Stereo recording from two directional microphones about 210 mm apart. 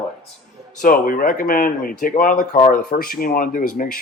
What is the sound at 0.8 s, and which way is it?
Speech, 45° left (ahead or behind).